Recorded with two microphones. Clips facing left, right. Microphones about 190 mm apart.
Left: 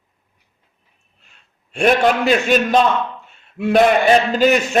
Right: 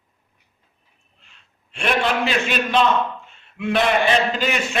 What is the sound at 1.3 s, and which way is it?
A man's voice, 45° left (ahead or behind).